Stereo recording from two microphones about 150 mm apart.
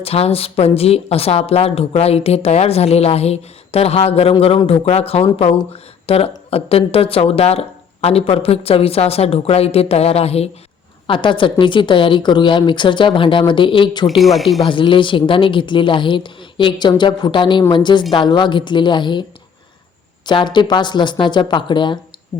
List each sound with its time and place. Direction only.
0.0 s a woman's voice: 40° left (ahead or behind)
14.1 s speech: centre (ahead or behind)
14.7 s a woman's voice: 35° left (ahead or behind)
20.2 s a woman's voice: 30° left (ahead or behind)